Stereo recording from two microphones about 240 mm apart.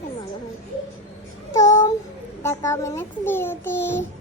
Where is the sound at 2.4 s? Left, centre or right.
Centre.